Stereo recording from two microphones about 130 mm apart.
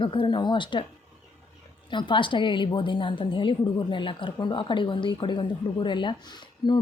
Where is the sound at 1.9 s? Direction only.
40° left (ahead or behind).